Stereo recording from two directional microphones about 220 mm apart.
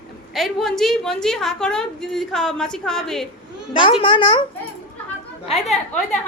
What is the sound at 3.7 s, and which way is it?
Speech, 25° left (ahead or behind).